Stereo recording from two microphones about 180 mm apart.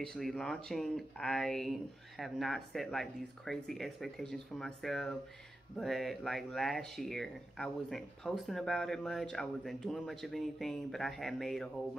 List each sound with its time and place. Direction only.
0.0 s speech: 5° left (ahead or behind)